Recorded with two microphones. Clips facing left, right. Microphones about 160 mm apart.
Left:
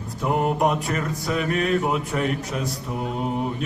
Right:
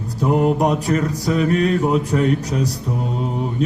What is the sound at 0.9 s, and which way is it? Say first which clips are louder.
Speech: right 6 dB; 40° right (ahead or behind).